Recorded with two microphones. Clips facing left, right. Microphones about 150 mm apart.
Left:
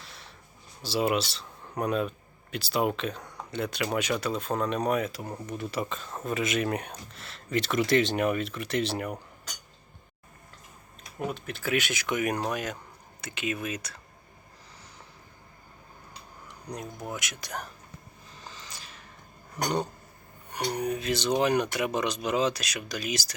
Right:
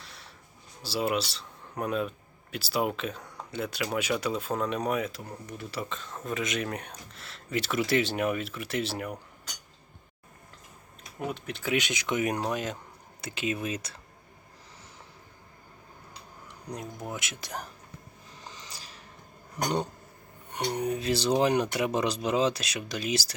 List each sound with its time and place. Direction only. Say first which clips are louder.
0.0 s a sound: left 1 dB; centre (ahead or behind)
0.8 s speech: left 2 dB; centre (ahead or behind)
5.2 s speech: left 5 dB; 20° left (ahead or behind)
6.2 s speech: left 3 dB; 5° left (ahead or behind)
11.3 s speech: even; 15° right (ahead or behind); by 14.0 s 30° right (ahead or behind)
17.1 s speech: left 1 dB; 25° right (ahead or behind)
18.3 s a sound: even; 20° right (ahead or behind)
19.6 s speech: even; 20° right (ahead or behind)
20.7 s speech: right 1 dB; 25° right (ahead or behind)